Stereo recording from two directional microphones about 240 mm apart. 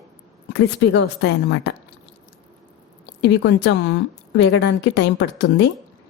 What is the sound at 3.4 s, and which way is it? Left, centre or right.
A woman's voice, left.